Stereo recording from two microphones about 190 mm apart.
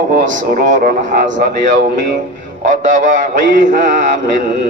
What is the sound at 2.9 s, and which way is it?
Speech, 40° right (ahead or behind).